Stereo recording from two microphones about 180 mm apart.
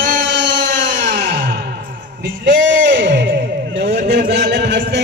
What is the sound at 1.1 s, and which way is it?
Music, 70° right (ahead or behind).